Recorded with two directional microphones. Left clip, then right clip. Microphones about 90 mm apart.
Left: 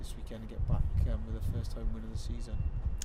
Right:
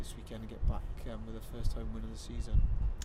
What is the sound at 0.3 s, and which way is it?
Speech, 10° right (ahead or behind).